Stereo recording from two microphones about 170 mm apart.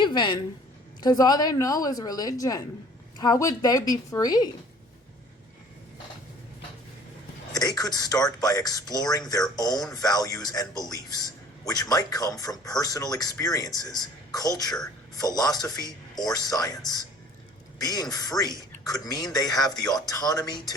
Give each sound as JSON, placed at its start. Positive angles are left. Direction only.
{"t": 0.0, "sound": "a man's voice", "side_deg": 25}
{"t": 7.8, "sound": "a man's voice", "side_deg": 20}
{"t": 17.7, "sound": "a man's voice", "side_deg": 20}